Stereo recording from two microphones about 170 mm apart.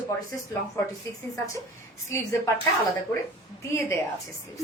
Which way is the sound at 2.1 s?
15° left (ahead or behind).